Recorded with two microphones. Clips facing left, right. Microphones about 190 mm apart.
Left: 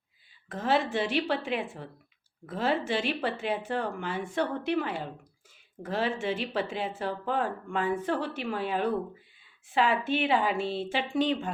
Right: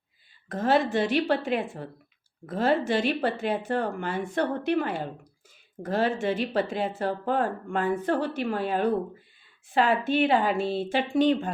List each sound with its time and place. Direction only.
0.4 s speech: 40° right (ahead or behind)